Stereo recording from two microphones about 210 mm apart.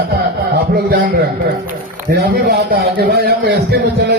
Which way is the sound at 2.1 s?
50° right (ahead or behind).